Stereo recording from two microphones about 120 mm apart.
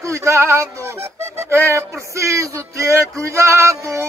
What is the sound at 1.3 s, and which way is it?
Speech, 20° right (ahead or behind).